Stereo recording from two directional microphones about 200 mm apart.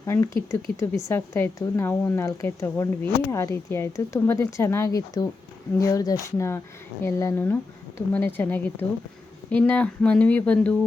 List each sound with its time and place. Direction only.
0.0 s a woman's voice: 15° left (ahead or behind)